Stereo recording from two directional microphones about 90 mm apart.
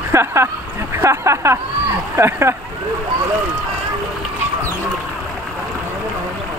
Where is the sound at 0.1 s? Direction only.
30° right (ahead or behind).